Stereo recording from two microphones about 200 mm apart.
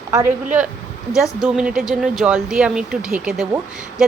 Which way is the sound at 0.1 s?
15° right (ahead or behind).